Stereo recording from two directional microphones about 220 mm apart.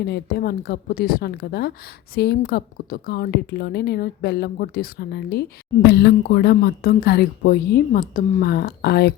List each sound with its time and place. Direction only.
0.0 s a woman's voice: 45° left (ahead or behind)